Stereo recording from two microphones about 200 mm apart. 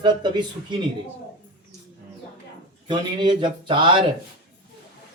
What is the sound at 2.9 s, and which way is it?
Speech, 20° right (ahead or behind).